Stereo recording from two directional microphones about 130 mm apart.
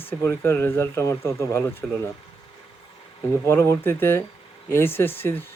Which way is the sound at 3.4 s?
20° left (ahead or behind).